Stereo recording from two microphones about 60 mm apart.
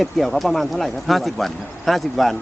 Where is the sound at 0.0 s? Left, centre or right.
Centre.